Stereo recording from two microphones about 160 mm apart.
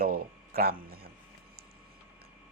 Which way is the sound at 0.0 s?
70° right (ahead or behind).